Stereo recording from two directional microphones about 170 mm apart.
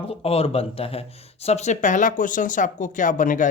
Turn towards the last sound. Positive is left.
turn(degrees=50)  # may be behind; listen again after turning